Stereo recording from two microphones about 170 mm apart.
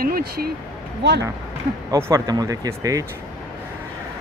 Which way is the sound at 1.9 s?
15° right (ahead or behind).